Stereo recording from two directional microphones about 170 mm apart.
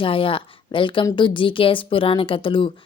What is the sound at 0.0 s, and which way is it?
A woman's voice, 30° left (ahead or behind).